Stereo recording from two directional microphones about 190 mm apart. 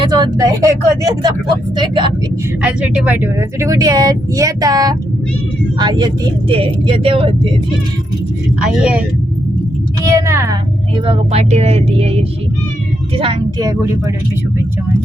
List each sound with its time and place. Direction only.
0.1 s speech: 20° right (ahead or behind)
2.6 s speech: 5° right (ahead or behind); by 7.3 s 30° right (ahead or behind)
8.6 s speech: 5° right (ahead or behind)
10.1 s a woman's voice: 15° right (ahead or behind)
10.9 s speech: 30° right (ahead or behind)
13.1 s speech: 25° right (ahead or behind)